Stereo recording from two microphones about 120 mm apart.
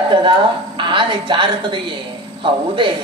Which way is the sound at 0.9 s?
40° right (ahead or behind).